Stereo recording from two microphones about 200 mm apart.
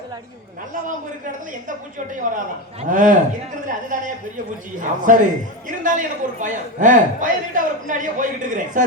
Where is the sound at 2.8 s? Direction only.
40° right (ahead or behind).